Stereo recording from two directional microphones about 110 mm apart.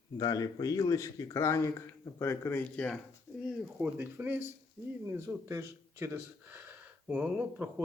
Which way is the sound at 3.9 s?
20° right (ahead or behind).